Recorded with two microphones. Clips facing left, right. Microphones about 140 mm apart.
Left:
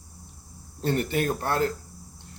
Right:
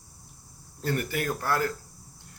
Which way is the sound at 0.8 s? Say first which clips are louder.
Left 4 dB; 25° left (ahead or behind).